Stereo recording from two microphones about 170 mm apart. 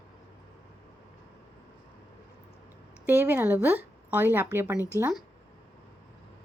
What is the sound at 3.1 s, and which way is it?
Speech, 10° right (ahead or behind).